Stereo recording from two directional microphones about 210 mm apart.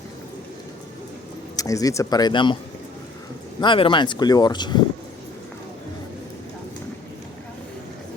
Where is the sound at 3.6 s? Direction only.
25° left (ahead or behind).